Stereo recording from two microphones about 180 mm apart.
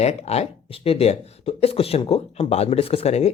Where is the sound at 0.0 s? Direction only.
35° left (ahead or behind).